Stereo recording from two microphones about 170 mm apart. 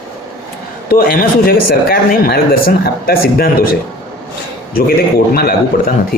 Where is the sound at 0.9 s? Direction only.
60° left (ahead or behind).